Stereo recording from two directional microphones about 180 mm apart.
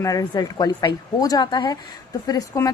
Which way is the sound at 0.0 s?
20° left (ahead or behind).